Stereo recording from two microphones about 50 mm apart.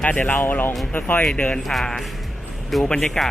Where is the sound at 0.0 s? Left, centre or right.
Left.